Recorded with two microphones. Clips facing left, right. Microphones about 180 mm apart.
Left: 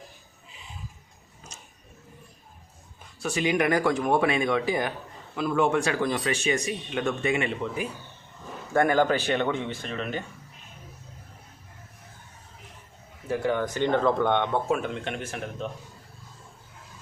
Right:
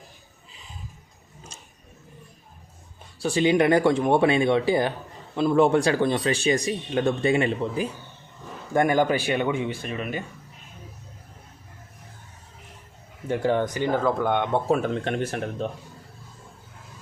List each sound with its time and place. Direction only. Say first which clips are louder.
1.5 s a sound: right 1 dB; 30° right (ahead or behind)
3.2 s speech: right 5 dB; 30° right (ahead or behind)
8.7 s speech: right 1 dB; 15° right (ahead or behind)
13.2 s speech: right 3 dB; 30° right (ahead or behind)
13.7 s speech: even; 5° right (ahead or behind)
14.7 s speech: right 4 dB; 35° right (ahead or behind)